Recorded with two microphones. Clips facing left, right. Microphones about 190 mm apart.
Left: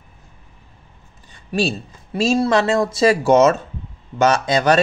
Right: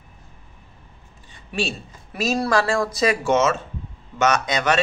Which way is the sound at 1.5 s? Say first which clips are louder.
Left 6 dB; 35° left (ahead or behind).